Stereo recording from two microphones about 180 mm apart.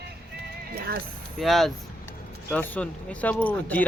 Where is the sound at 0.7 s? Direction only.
60° right (ahead or behind).